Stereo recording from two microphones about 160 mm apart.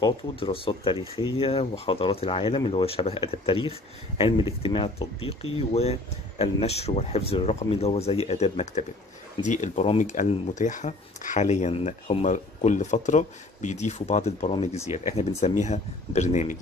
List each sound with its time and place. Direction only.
0.0 s speech: 35° left (ahead or behind)